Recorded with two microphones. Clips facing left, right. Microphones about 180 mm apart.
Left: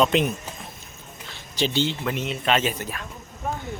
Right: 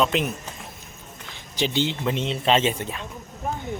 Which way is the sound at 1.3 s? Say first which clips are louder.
Left 1 dB; 15° right (ahead or behind).